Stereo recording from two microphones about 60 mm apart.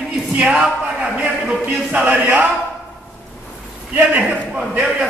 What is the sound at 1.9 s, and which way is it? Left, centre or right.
Speech, right.